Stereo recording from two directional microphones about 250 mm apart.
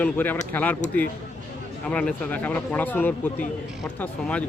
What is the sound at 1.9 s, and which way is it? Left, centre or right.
A man's voice, centre.